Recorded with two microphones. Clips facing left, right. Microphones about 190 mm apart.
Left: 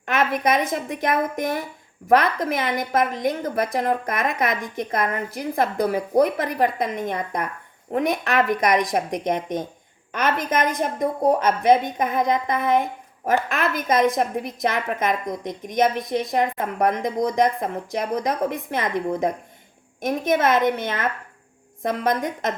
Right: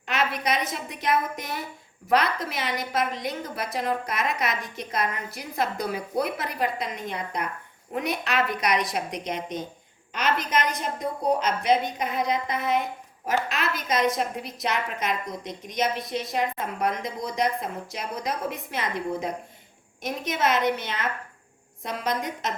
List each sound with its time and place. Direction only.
0.0 s a woman's voice: 50° left (ahead or behind)